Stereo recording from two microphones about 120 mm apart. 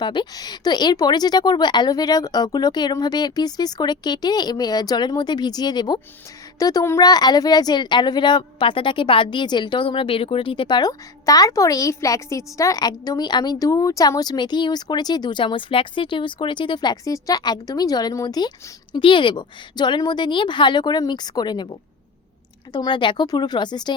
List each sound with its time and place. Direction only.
0.0 s speech: 40° left (ahead or behind)